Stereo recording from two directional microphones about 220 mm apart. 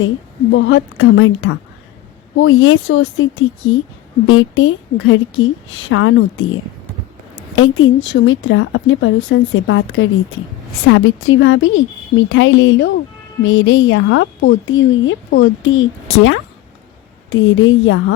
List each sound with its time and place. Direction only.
0.5 s a woman's voice: 60° left (ahead or behind)